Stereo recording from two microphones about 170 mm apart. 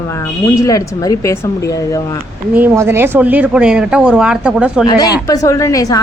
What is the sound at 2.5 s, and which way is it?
Speech, 10° right (ahead or behind).